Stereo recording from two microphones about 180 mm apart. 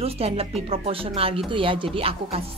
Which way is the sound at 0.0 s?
35° right (ahead or behind).